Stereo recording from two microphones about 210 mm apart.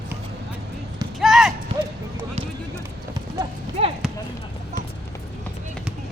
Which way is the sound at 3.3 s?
30° right (ahead or behind).